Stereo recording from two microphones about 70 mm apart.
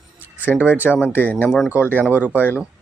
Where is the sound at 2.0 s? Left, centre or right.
Right.